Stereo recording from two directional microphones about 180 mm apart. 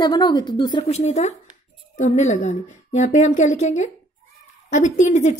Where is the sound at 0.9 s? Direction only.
40° left (ahead or behind).